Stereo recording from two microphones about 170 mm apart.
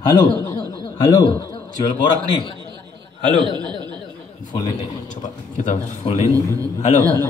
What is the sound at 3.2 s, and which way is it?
Speech, 25° right (ahead or behind).